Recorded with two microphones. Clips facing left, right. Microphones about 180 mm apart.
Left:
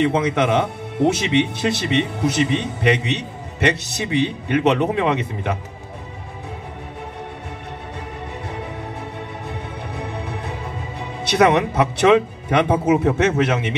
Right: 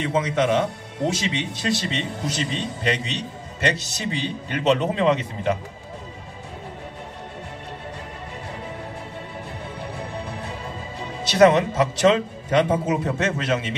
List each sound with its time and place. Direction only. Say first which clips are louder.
0.0 s a man's voice: left 4 dB; 70° left (ahead or behind)
9.5 s music: left 3 dB; 65° left (ahead or behind)
11.0 s speech: right 1 dB; 65° left (ahead or behind)